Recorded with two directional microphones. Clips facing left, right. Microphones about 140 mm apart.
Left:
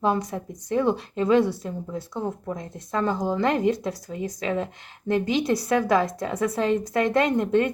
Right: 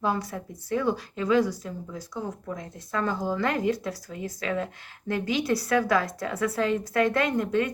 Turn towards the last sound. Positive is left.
turn(degrees=25)  # may be behind; listen again after turning